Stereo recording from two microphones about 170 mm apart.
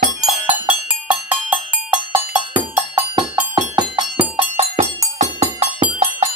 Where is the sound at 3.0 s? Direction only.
25° right (ahead or behind).